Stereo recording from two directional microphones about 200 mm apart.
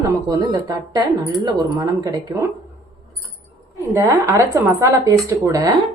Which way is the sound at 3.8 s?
15° right (ahead or behind).